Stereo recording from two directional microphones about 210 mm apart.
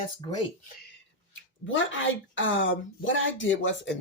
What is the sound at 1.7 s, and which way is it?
Speech, 65° left (ahead or behind).